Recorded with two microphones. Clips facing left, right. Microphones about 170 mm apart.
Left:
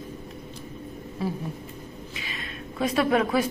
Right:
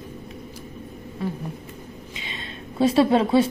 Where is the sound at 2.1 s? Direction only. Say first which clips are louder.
Right 2 dB; 25° right (ahead or behind).